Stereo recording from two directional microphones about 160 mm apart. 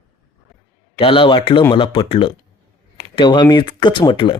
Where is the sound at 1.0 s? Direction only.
35° left (ahead or behind).